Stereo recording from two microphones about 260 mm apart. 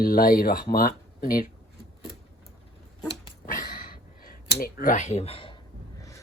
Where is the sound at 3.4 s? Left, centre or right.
Left.